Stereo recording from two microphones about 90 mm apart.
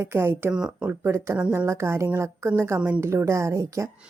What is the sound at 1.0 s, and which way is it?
Speech, 30° right (ahead or behind).